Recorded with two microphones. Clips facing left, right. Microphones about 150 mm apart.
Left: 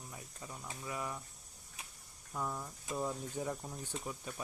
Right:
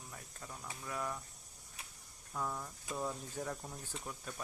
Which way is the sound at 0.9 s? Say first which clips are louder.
Even; 5° left (ahead or behind).